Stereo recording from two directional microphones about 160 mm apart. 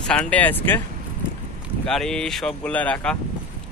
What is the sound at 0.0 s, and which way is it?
Speech, 5° left (ahead or behind).